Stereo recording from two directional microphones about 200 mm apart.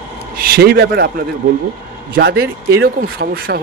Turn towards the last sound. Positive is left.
turn(degrees=-50)  # may be behind; listen again after turning